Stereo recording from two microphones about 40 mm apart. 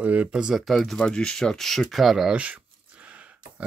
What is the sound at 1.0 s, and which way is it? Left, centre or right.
Speech, left.